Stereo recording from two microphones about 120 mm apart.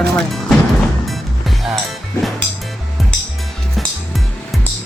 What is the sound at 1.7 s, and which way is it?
Music, centre (ahead or behind).